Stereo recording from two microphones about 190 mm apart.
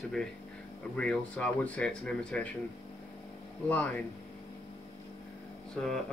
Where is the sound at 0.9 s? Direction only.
5° left (ahead or behind).